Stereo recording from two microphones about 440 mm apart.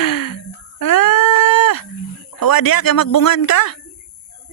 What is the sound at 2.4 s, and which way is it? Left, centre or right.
Speech, left.